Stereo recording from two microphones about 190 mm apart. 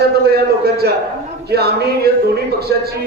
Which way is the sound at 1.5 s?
55° right (ahead or behind).